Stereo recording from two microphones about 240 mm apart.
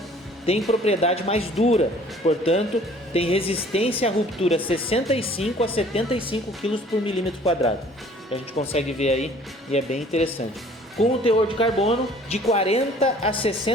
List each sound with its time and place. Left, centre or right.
0.7 s speech: left